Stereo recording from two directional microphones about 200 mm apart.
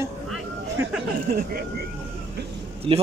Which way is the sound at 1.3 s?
50° right (ahead or behind).